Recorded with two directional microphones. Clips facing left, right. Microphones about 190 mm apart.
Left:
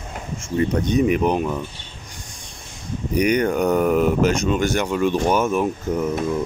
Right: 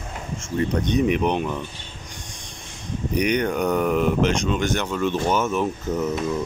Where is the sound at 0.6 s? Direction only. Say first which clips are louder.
Left 2 dB; 5° left (ahead or behind).